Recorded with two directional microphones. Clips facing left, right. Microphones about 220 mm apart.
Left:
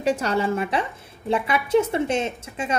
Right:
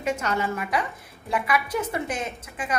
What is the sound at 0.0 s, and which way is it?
A woman's voice, 35° left (ahead or behind).